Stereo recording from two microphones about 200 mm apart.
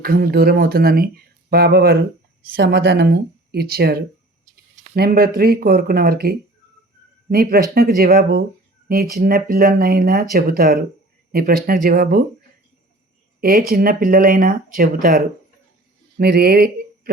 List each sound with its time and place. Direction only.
0.0 s speech: 50° right (ahead or behind)
13.4 s speech: 45° right (ahead or behind)